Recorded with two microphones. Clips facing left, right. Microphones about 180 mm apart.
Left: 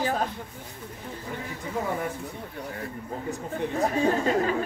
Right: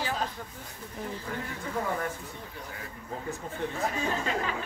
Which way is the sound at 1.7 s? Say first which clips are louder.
Left 2 dB; 10° left (ahead or behind).